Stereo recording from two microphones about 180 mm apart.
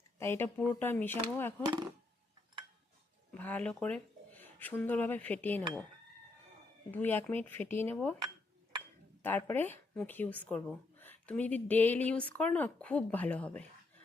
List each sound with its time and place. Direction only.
0.2 s speech: 15° left (ahead or behind)
1.6 s speech: 20° right (ahead or behind)
3.3 s speech: 10° left (ahead or behind)
6.9 s speech: 10° left (ahead or behind)
9.2 s speech: 10° left (ahead or behind)